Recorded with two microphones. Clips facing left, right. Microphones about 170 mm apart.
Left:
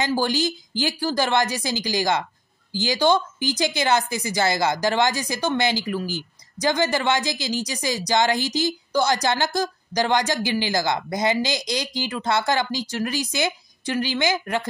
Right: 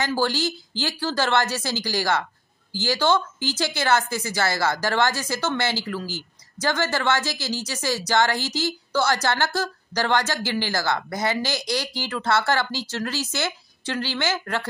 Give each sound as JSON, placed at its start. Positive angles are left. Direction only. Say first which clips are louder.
{"t": 0.0, "sound": "a woman's voice", "louder": "left 1 dB", "side_deg": 15}